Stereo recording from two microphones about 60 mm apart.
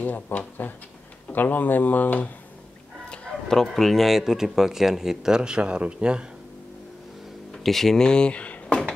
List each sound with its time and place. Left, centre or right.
0.0 s speech: left
3.1 s speech: centre
7.6 s speech: centre